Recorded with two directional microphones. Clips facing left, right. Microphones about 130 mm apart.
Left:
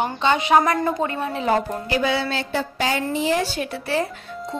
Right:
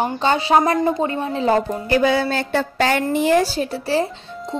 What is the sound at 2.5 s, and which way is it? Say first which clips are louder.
Speech: right 5 dB; 65° right (ahead or behind).